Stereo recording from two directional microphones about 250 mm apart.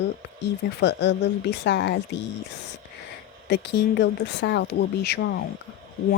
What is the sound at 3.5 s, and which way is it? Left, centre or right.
Speech, left.